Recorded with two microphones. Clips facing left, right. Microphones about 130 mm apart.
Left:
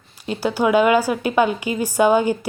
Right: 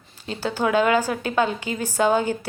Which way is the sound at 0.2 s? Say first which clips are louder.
Left 4 dB; 10° left (ahead or behind).